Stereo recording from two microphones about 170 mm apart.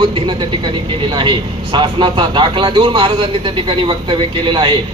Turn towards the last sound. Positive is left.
turn(degrees=-30)  # may be behind; listen again after turning